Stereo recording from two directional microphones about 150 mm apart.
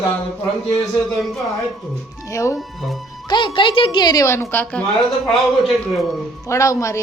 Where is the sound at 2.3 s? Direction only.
20° left (ahead or behind).